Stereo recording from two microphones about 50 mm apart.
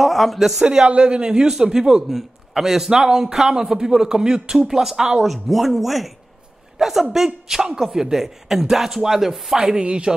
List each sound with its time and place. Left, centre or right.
0.0 s speech: centre
0.7 s a man's voice: right
9.8 s speech: centre